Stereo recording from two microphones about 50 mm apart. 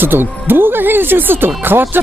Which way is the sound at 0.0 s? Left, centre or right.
Right.